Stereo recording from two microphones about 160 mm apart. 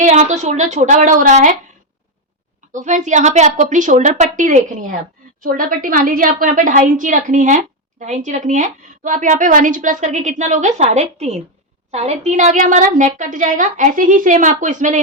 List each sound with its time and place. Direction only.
0.0 s a woman's voice: 45° right (ahead or behind)
2.7 s a woman's voice: 50° right (ahead or behind)